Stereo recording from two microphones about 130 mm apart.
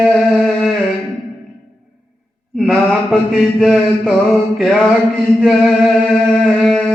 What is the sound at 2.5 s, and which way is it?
Speech, 5° left (ahead or behind).